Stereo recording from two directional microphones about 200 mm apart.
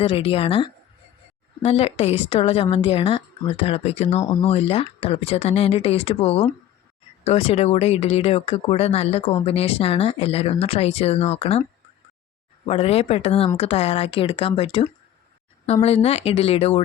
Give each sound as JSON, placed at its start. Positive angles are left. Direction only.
{"t": 0.0, "sound": "speech", "side_deg": 30}
{"t": 12.6, "sound": "speech", "side_deg": 30}